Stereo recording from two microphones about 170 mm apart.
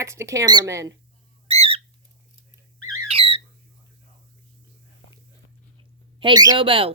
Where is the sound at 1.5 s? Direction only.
35° right (ahead or behind).